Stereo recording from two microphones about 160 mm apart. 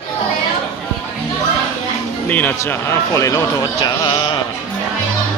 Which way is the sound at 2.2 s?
10° left (ahead or behind).